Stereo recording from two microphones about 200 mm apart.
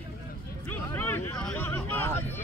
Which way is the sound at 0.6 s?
10° left (ahead or behind).